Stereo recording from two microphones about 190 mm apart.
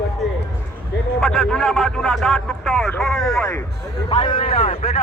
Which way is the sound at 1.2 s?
Centre (ahead or behind).